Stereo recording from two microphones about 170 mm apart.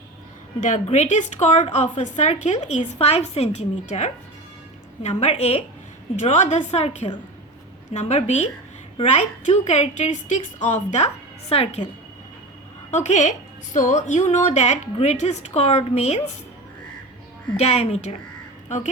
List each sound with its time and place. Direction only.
0.6 s a woman's voice: 40° left (ahead or behind)
12.9 s a woman's voice: 45° left (ahead or behind)
17.6 s a woman's voice: 40° left (ahead or behind)